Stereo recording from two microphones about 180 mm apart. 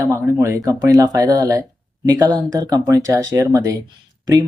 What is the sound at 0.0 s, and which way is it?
Speech, 15° right (ahead or behind).